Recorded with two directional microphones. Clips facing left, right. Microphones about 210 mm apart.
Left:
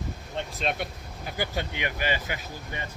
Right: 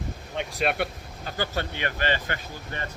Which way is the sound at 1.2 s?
15° left (ahead or behind).